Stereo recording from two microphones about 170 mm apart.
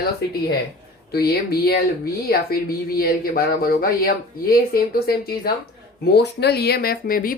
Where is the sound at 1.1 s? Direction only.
65° left (ahead or behind).